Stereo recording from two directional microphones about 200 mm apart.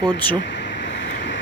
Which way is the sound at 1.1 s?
65° left (ahead or behind).